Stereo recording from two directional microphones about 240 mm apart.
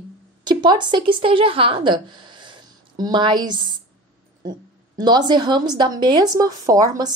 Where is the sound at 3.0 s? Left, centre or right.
Centre.